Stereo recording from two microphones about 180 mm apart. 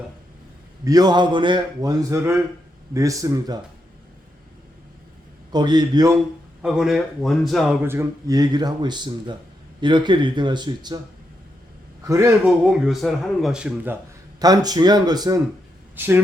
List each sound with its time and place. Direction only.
0.9 s speech: 20° right (ahead or behind)
5.5 s speech: 25° right (ahead or behind)
6.6 s speech: centre (ahead or behind)
7.8 s speech: 15° right (ahead or behind)
12.0 s a man's voice: 15° right (ahead or behind)
12.6 s speech: centre (ahead or behind)
14.3 s speech: 20° right (ahead or behind)
16.0 s a man's voice: 10° right (ahead or behind)